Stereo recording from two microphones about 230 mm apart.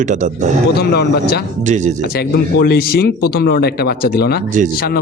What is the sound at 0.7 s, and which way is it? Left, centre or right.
Speech, left.